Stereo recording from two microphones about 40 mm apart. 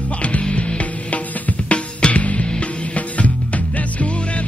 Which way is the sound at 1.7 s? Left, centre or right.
Left.